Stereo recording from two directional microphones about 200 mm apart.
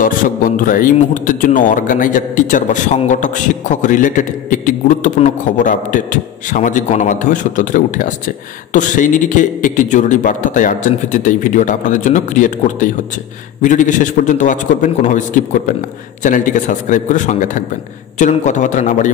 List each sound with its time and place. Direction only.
0.0 s a man's voice: 45° left (ahead or behind)